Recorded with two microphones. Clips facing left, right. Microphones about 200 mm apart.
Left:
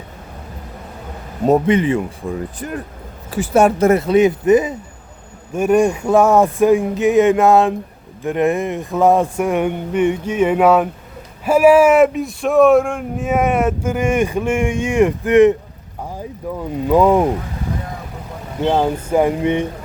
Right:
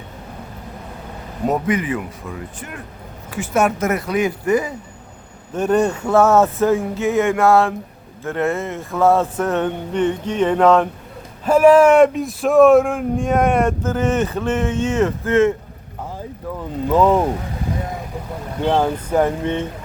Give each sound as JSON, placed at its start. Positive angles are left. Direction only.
{"t": 1.5, "sound": "speech", "side_deg": 25}
{"t": 5.5, "sound": "speech", "side_deg": 10}
{"t": 18.6, "sound": "speech", "side_deg": 10}